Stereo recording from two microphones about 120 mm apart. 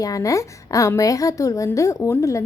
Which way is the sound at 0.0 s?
30° left (ahead or behind).